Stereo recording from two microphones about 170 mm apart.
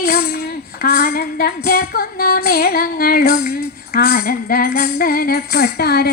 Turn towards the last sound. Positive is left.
turn(degrees=70)  # may be behind; listen again after turning